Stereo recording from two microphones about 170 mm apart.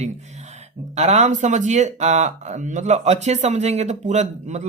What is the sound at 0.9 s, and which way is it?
Speech, 40° right (ahead or behind).